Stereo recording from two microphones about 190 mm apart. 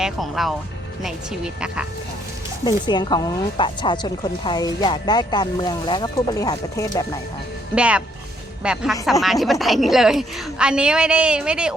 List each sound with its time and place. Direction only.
0.0 s a woman's voice: centre (ahead or behind)
1.6 s a woman's voice: 5° right (ahead or behind)
2.6 s speech: 25° left (ahead or behind)
7.8 s a woman's voice: 5° right (ahead or behind)